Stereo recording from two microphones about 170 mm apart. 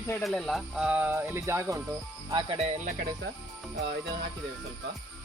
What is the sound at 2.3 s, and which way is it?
Speech, 30° right (ahead or behind).